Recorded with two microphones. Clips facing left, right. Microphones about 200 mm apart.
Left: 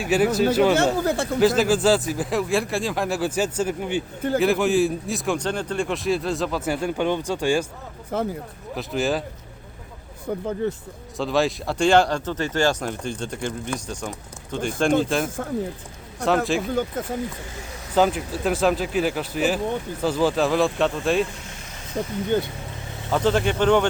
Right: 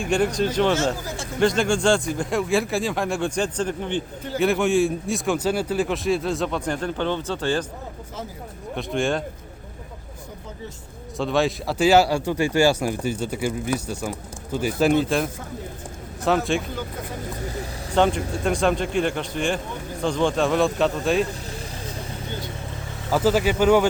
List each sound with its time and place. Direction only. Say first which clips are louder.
0.0 s a man's voice: left 2 dB; 5° left (ahead or behind)
0.9 s speech: left 10 dB; 60° left (ahead or behind)
1.4 s a man's voice: left 1 dB; 5° left (ahead or behind)
8.1 s speech: left 11 dB; 60° left (ahead or behind)
8.7 s a man's voice: even; centre (ahead or behind)
10.4 s speech: left 13 dB; 60° left (ahead or behind)
11.2 s speech: even; centre (ahead or behind)
16.2 s a man's voice: left 1 dB; centre (ahead or behind)
17.9 s a man's voice: even; 5° left (ahead or behind)
22.3 s speech: left 13 dB; 55° left (ahead or behind)
23.1 s speech: right 1 dB; 5° right (ahead or behind)